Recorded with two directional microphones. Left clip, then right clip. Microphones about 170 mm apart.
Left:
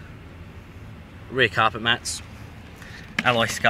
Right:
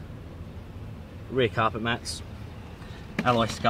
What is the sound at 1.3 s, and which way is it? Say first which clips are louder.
Speech: left 5 dB; 10° left (ahead or behind).